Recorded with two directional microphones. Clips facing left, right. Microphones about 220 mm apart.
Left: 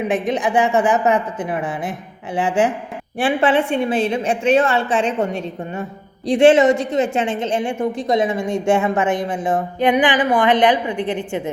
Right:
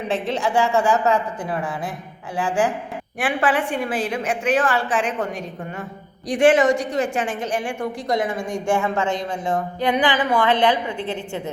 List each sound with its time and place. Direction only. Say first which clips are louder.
0.1 s a woman's voice: left 1 dB; 15° left (ahead or behind)